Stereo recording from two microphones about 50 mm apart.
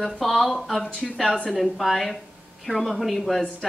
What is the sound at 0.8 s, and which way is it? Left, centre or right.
Speech, centre.